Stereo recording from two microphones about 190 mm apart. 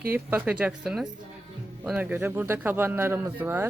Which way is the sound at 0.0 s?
10° right (ahead or behind).